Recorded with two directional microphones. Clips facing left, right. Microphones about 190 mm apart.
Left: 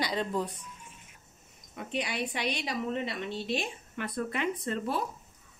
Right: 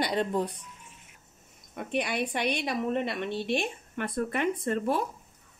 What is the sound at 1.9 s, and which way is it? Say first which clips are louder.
A woman's voice: right 4 dB; 55° right (ahead or behind).